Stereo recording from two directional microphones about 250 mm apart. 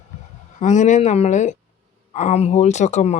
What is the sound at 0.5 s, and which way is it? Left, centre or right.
A woman's voice, left.